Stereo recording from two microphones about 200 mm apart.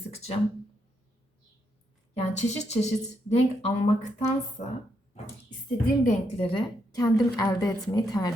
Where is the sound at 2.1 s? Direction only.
35° left (ahead or behind).